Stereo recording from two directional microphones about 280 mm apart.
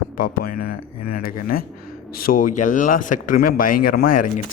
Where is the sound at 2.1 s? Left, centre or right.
Left.